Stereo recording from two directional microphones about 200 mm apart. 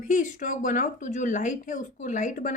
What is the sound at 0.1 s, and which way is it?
Speech, 40° left (ahead or behind).